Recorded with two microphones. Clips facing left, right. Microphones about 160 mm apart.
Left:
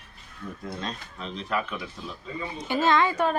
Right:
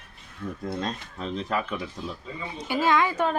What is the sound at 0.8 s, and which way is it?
Speech, 40° right (ahead or behind).